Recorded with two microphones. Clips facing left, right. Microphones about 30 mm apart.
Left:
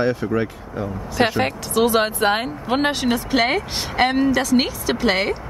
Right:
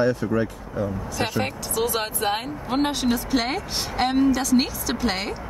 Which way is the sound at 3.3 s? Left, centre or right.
Left.